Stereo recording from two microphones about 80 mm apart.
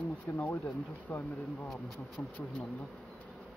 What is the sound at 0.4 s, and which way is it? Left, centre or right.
Speech, left.